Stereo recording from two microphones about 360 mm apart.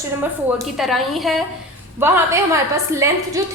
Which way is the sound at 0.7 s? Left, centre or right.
Centre.